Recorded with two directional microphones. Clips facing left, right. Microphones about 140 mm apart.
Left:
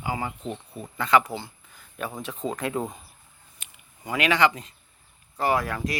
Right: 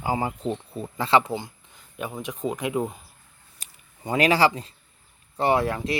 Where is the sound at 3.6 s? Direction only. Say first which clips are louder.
Right 1 dB; 35° right (ahead or behind).